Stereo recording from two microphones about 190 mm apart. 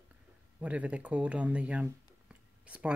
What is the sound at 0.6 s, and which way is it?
Speech, 5° right (ahead or behind).